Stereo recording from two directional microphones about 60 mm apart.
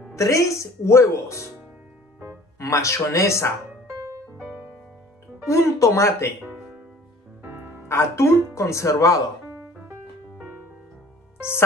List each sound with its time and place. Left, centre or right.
0.1 s speech: left
2.6 s speech: left
4.0 s music: right
4.5 s music: right
5.5 s speech: left
6.4 s music: right
7.4 s music: right
7.9 s speech: left